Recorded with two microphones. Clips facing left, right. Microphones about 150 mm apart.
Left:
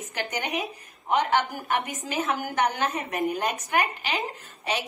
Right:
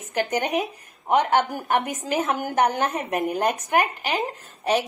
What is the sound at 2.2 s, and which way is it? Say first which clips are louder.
Speech: right 3 dB; 50° right (ahead or behind).